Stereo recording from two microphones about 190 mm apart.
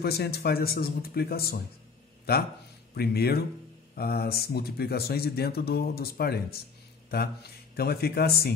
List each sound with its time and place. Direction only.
0.0 s speech: 55° left (ahead or behind)
2.9 s speech: 55° left (ahead or behind)